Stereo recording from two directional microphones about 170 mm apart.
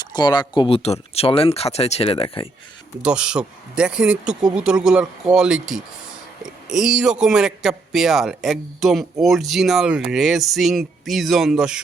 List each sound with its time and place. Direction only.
0.0 s speech: 25° left (ahead or behind)
3.0 s a man's voice: 5° right (ahead or behind)